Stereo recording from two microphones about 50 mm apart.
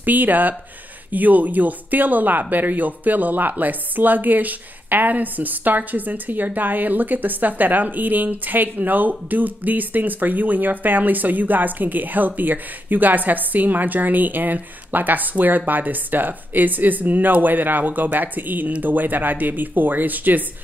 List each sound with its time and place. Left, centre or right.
0.0 s speech: right